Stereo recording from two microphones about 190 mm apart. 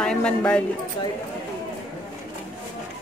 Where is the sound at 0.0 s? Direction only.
5° left (ahead or behind).